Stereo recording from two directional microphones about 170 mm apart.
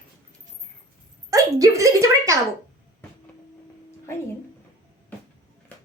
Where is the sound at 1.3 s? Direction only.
20° right (ahead or behind).